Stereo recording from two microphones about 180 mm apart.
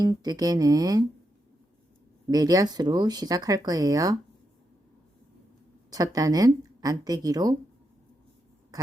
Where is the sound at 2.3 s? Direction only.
20° right (ahead or behind).